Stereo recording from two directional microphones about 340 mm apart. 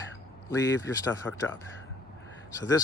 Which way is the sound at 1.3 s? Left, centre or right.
Centre.